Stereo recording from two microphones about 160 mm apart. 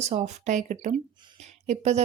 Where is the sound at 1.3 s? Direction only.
45° right (ahead or behind).